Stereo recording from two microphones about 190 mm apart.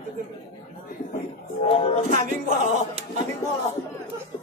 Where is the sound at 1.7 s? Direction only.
30° left (ahead or behind).